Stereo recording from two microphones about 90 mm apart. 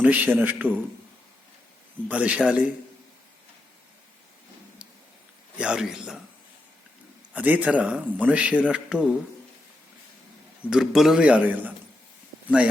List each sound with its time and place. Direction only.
0.0 s a man's voice: 20° right (ahead or behind)
2.0 s speech: 15° right (ahead or behind)
5.5 s speech: 10° right (ahead or behind)
7.3 s speech: 15° right (ahead or behind)
10.7 s speech: 5° right (ahead or behind)